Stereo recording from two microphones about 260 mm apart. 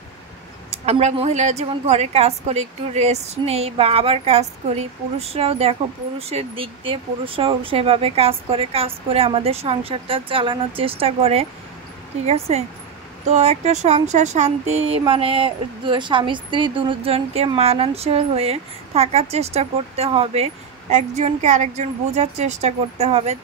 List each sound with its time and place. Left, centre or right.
0.7 s a woman's voice: right